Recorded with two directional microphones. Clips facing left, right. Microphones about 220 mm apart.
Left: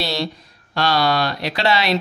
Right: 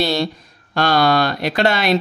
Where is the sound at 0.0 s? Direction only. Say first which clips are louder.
Right 5 dB; 50° right (ahead or behind).